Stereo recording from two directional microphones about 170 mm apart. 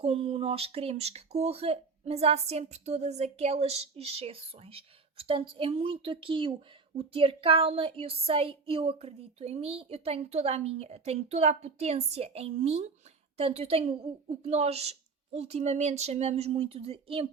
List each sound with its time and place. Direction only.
0.0 s speech: 35° right (ahead or behind)